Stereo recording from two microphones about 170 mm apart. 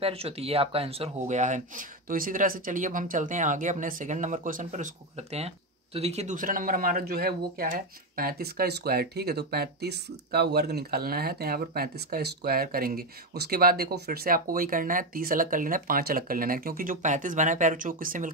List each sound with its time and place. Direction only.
0.0 s speech: 35° right (ahead or behind); by 18.3 s 55° right (ahead or behind)